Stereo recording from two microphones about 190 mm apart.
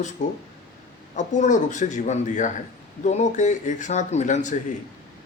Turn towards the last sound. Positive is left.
turn(degrees=40)  # may be behind; listen again after turning